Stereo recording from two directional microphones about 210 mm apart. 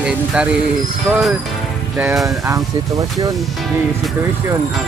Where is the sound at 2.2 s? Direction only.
15° right (ahead or behind).